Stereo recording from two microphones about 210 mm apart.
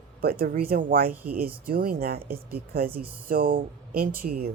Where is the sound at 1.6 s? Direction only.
45° right (ahead or behind).